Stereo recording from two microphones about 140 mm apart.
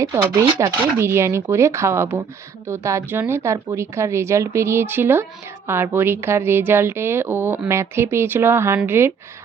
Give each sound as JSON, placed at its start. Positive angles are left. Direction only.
{"t": 0.3, "sound": "a woman's voice", "side_deg": -20}